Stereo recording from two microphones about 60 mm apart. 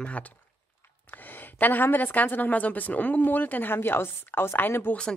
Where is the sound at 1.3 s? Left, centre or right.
Left.